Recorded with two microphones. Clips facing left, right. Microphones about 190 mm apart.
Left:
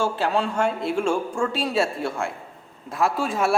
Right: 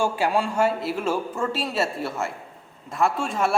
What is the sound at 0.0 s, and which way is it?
A woman's voice, 10° right (ahead or behind).